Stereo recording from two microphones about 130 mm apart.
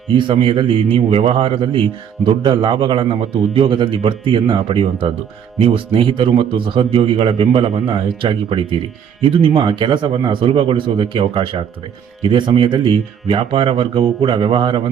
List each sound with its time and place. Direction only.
0.1 s a man's voice: 40° right (ahead or behind)